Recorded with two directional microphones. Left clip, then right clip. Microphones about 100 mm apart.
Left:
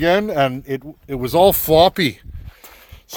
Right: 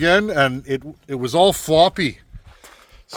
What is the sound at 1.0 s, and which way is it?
Speech, 45° left (ahead or behind).